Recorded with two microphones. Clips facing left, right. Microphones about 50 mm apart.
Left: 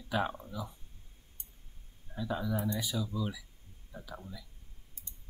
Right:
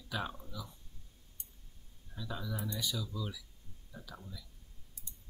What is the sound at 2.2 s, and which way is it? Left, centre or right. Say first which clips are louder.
Speech: left 7 dB; left.